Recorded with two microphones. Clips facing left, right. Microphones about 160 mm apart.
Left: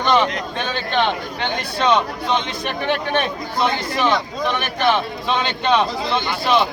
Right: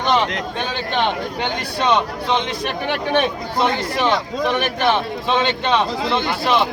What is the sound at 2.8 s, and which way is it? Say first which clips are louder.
Speech: right 1 dB; 10° right (ahead or behind).